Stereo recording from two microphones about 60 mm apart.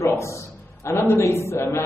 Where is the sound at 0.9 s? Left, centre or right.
Left.